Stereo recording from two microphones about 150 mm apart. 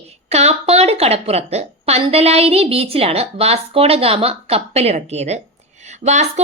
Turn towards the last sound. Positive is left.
turn(degrees=-50)  # may be behind; listen again after turning